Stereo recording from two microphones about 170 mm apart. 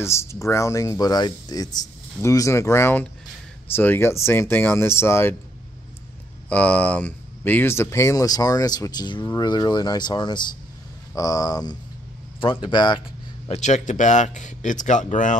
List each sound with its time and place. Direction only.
0.0 s speech: 15° left (ahead or behind)
6.5 s speech: 10° left (ahead or behind); by 13.0 s 25° left (ahead or behind)
13.5 s speech: 45° left (ahead or behind)